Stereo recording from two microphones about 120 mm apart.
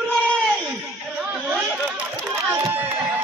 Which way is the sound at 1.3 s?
10° right (ahead or behind).